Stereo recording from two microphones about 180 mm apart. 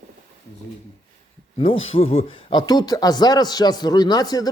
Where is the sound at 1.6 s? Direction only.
30° left (ahead or behind).